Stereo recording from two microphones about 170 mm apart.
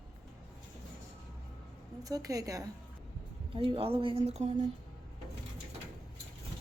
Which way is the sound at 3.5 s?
35° right (ahead or behind).